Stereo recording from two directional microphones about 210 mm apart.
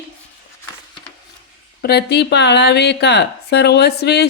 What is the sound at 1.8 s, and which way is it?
Speech, 50° left (ahead or behind).